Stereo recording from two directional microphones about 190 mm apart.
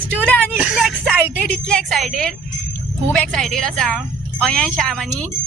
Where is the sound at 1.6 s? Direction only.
5° left (ahead or behind).